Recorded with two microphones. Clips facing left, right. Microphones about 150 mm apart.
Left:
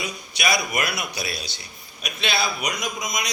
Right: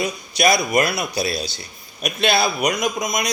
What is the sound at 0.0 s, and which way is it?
A man's voice, 40° right (ahead or behind).